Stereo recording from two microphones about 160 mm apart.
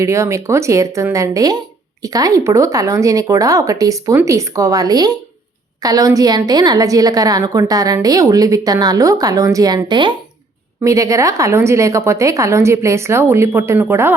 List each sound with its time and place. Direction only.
0.0 s a woman's voice: 20° right (ahead or behind)